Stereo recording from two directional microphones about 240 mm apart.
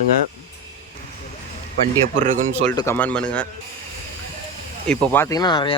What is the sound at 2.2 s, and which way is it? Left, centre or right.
Speech, right.